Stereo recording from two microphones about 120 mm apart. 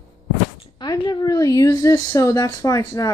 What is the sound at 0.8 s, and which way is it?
A woman's voice, 35° left (ahead or behind).